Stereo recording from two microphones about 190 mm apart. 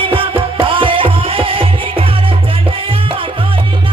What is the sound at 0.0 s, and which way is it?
Music, 30° right (ahead or behind).